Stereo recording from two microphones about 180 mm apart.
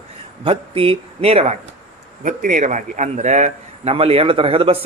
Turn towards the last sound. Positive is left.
turn(degrees=-30)  # may be behind; listen again after turning